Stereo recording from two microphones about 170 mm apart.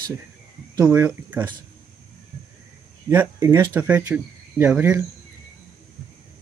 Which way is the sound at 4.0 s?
20° right (ahead or behind).